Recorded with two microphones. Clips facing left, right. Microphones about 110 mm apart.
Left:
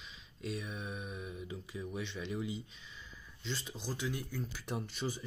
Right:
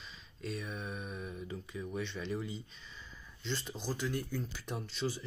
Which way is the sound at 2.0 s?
10° left (ahead or behind).